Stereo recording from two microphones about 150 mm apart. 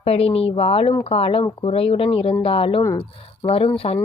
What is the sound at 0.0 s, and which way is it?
A woman's voice, 40° left (ahead or behind).